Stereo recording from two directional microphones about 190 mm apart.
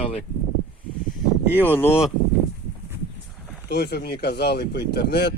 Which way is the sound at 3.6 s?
60° left (ahead or behind).